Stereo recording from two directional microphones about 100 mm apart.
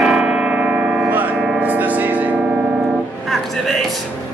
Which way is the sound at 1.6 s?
15° right (ahead or behind).